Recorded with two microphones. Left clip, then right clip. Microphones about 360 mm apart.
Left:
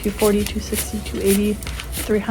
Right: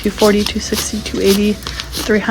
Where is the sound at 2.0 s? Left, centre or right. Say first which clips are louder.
Right 6 dB; right.